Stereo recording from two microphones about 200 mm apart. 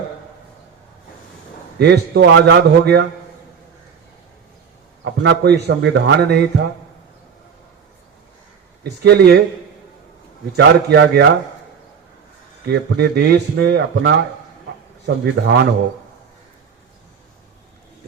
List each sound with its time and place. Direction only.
1.8 s speech: 55° right (ahead or behind)
5.2 s speech: 55° right (ahead or behind)
8.8 s speech: 55° right (ahead or behind)
10.6 s speech: 60° right (ahead or behind)
12.6 s speech: 55° right (ahead or behind)